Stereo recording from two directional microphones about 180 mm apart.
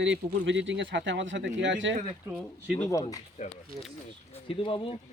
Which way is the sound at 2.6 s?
10° left (ahead or behind).